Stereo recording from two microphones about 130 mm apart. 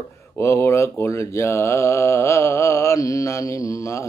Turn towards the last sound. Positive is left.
turn(degrees=25)  # may be behind; listen again after turning